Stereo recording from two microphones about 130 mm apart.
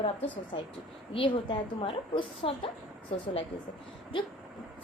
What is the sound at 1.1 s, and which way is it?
A woman's voice, 40° left (ahead or behind).